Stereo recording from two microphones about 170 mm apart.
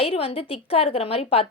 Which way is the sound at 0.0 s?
35° left (ahead or behind).